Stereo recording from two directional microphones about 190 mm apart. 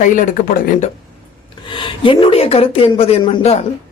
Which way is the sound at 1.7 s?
25° left (ahead or behind).